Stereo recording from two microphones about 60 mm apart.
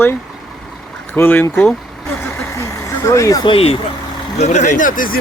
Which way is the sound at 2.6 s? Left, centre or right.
Left.